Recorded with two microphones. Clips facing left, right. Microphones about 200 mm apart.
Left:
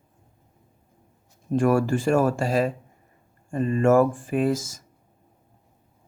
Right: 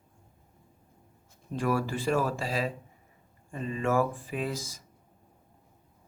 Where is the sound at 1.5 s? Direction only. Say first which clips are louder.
Left 9 dB; 50° left (ahead or behind).